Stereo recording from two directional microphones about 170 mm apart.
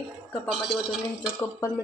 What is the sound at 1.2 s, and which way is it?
Speech, 15° left (ahead or behind).